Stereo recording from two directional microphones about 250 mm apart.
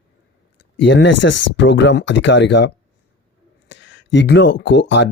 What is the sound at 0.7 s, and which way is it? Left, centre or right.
Speech, left.